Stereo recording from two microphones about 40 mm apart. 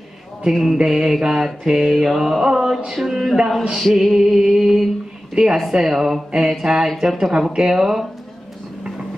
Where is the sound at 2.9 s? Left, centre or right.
Centre.